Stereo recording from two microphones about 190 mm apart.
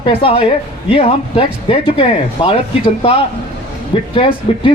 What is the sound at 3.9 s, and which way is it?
Speech, 30° left (ahead or behind).